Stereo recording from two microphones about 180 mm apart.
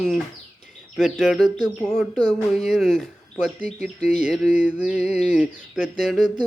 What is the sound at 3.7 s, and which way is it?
Speech, 40° left (ahead or behind).